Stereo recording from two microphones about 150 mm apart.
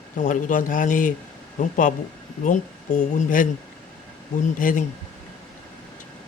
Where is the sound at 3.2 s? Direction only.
60° left (ahead or behind).